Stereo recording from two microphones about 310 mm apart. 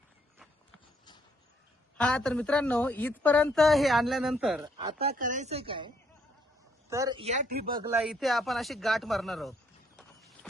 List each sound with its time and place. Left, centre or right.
2.0 s a woman's voice: centre
4.9 s speech: right
6.9 s speech: centre
7.8 s a woman's voice: centre
10.2 s clip-clop: centre